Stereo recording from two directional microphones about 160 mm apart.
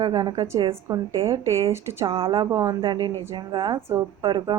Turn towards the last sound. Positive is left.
turn(degrees=-25)  # may be behind; listen again after turning